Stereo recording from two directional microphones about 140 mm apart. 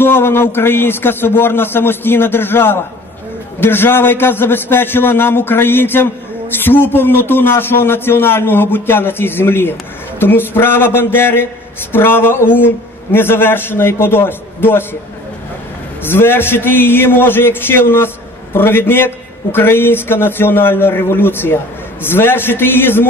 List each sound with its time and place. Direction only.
0.0 s a man's voice: 15° left (ahead or behind)
16.0 s a man's voice: 15° left (ahead or behind)